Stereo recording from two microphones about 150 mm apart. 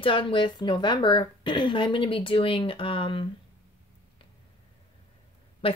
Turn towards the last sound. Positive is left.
turn(degrees=40)  # may be behind; listen again after turning